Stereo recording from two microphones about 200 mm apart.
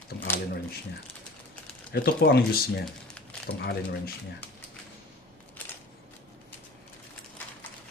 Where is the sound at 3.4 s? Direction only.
55° left (ahead or behind).